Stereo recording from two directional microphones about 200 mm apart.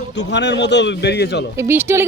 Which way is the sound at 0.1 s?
60° left (ahead or behind).